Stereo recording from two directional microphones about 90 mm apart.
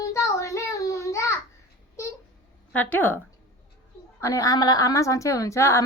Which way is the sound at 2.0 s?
35° left (ahead or behind).